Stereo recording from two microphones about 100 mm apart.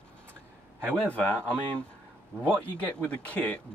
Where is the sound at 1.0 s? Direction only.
15° left (ahead or behind).